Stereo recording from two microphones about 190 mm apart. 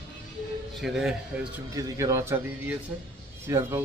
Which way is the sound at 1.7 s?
15° right (ahead or behind).